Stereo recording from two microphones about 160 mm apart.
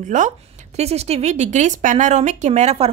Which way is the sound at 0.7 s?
40° right (ahead or behind).